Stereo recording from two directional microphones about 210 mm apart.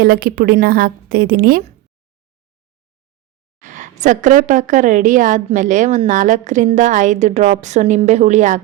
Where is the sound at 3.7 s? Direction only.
35° right (ahead or behind).